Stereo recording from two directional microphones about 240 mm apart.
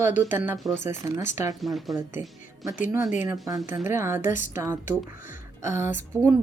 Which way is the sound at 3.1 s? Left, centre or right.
Centre.